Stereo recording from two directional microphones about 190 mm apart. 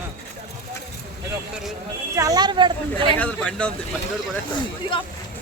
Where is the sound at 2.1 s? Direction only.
20° right (ahead or behind).